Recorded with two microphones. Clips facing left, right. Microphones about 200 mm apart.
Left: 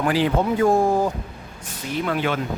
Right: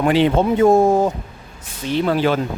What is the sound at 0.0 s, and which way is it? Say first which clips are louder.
Speech: right 5 dB; 25° right (ahead or behind).